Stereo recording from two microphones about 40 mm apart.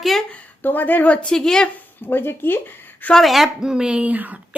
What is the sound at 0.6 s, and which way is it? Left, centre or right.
Speech, left.